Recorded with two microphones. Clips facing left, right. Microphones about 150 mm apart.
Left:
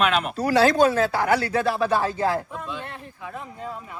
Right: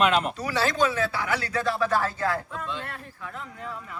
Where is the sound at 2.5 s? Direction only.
15° left (ahead or behind).